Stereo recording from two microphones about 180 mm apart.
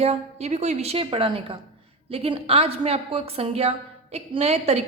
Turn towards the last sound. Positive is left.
turn(degrees=-35)  # may be behind; listen again after turning